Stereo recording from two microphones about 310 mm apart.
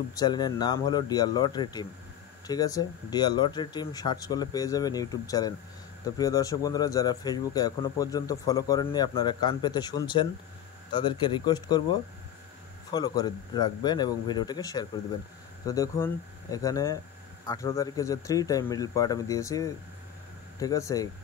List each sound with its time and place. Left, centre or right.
0.1 s speech: centre